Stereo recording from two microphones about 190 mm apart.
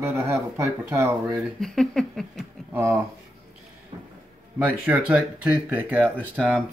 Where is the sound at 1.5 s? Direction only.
Centre (ahead or behind).